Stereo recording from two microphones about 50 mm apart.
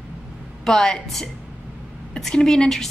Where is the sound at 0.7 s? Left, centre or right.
Centre.